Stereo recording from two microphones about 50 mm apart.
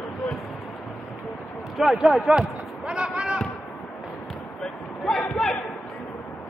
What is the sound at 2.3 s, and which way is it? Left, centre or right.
Basketball bounce, centre.